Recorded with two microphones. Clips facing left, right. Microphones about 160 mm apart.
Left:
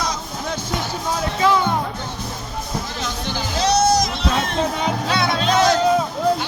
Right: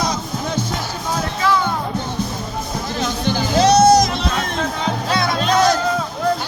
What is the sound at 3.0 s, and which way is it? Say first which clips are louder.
Music: right 6 dB; 45° right (ahead or behind).